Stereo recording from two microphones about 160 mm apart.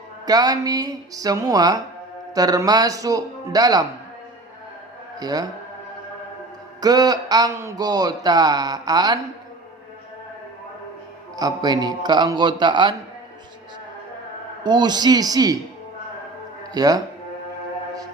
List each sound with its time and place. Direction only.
0.3 s speech: 25° right (ahead or behind)
5.2 s speech: 25° right (ahead or behind)
6.8 s speech: 25° right (ahead or behind)
11.3 s speech: 25° right (ahead or behind)
14.6 s speech: 30° right (ahead or behind)
16.7 s speech: 25° right (ahead or behind)